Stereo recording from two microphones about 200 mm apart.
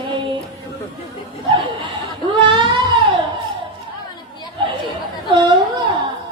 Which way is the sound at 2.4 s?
25° right (ahead or behind).